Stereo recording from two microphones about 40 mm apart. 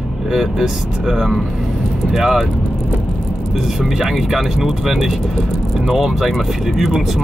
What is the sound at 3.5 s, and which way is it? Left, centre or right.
Speech, centre.